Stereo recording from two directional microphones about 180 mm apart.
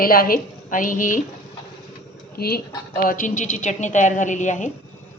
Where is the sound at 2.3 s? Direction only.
60° left (ahead or behind).